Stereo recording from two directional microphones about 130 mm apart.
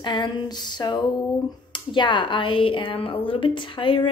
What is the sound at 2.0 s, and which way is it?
Speech, 35° left (ahead or behind).